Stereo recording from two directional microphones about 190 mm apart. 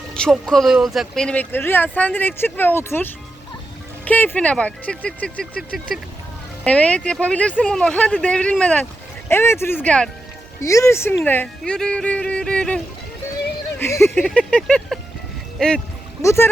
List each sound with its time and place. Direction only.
0.1 s speech: 5° left (ahead or behind)
16.2 s speech: 15° left (ahead or behind)